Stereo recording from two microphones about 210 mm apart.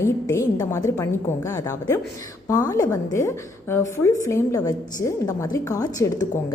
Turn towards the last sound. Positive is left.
turn(degrees=15)  # may be behind; listen again after turning